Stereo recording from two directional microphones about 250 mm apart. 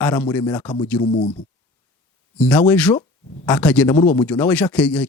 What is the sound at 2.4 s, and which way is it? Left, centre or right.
Speech, centre.